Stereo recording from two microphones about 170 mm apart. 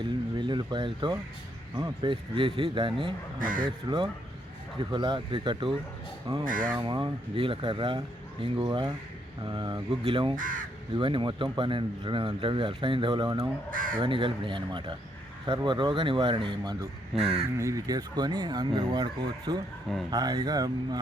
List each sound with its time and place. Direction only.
0.0 s speech: 25° right (ahead or behind)
3.3 s speech: 55° right (ahead or behind)
3.6 s speech: 25° right (ahead or behind)
6.4 s speech: 50° right (ahead or behind)
6.7 s speech: 25° right (ahead or behind)
10.3 s speech: 50° right (ahead or behind)
10.9 s speech: 30° right (ahead or behind)
13.7 s speech: 50° right (ahead or behind)
14.0 s speech: 30° right (ahead or behind)
17.6 s speech: 20° right (ahead or behind)